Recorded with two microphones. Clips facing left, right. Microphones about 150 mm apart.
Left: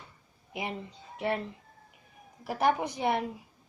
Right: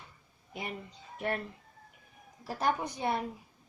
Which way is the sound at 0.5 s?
90° left.